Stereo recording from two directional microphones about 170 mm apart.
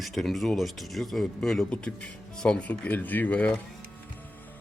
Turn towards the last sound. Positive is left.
turn(degrees=5)  # may be behind; listen again after turning